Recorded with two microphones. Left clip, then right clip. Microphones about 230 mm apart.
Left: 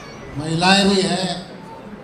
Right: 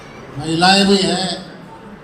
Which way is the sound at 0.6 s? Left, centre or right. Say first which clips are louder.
Right 3 dB; left.